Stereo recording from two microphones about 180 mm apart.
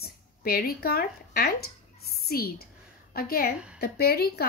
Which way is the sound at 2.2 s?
60° left (ahead or behind).